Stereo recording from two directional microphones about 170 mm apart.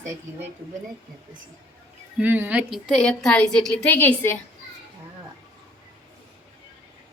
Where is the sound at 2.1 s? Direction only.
10° right (ahead or behind); by 4.4 s 10° left (ahead or behind).